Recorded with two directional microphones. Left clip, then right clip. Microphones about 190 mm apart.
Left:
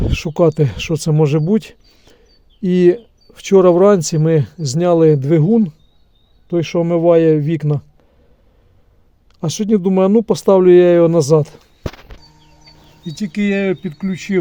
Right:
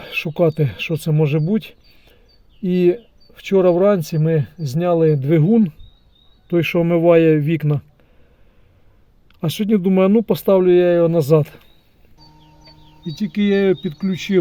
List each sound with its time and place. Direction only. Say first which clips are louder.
0.0 s speech: left 3 dB; 20° left (ahead or behind)
5.3 s a man's voice: left 2 dB; 5° left (ahead or behind)
9.4 s speech: left 3 dB; 10° left (ahead or behind); by 11.2 s 30° left (ahead or behind)
11.2 s speech: left 2 dB; 10° left (ahead or behind)
13.1 s a man's voice: even; centre (ahead or behind)